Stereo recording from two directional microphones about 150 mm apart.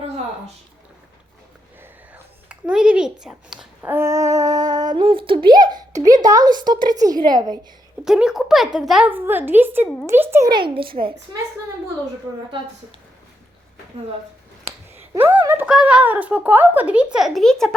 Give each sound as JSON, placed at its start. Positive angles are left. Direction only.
{"t": 2.5, "sound": "speech", "side_deg": -5}
{"t": 3.9, "sound": "speech", "side_deg": -20}
{"t": 8.0, "sound": "speech", "side_deg": -5}
{"t": 10.5, "sound": "a woman's voice", "side_deg": -35}
{"t": 15.1, "sound": "a sound", "side_deg": -10}
{"t": 15.4, "sound": "speech", "side_deg": -10}